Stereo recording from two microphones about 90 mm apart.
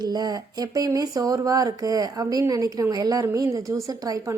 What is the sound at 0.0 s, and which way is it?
A woman's voice, 50° right (ahead or behind).